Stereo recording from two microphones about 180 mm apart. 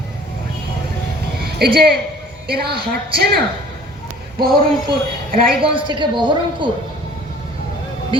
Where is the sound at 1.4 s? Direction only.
60° right (ahead or behind).